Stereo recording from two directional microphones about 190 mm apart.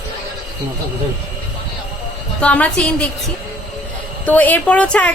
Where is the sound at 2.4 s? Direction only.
5° left (ahead or behind).